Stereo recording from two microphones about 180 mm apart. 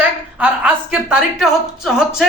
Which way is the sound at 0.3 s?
5° right (ahead or behind).